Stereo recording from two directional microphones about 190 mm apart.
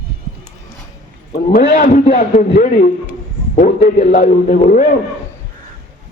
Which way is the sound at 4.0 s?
45° left (ahead or behind).